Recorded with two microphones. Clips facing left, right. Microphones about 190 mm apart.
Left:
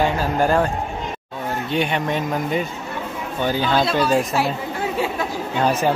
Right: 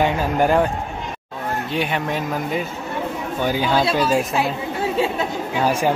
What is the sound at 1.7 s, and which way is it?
Speech, 5° right (ahead or behind).